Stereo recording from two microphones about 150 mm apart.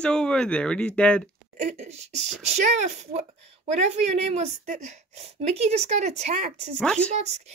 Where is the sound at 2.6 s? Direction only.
50° right (ahead or behind).